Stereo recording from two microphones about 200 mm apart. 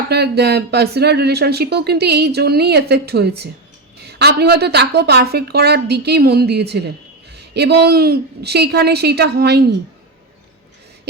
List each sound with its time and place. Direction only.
0.1 s speech: 55° right (ahead or behind)